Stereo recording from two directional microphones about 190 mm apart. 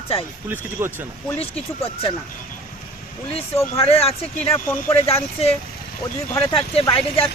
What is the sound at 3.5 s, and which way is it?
Speech, 15° left (ahead or behind).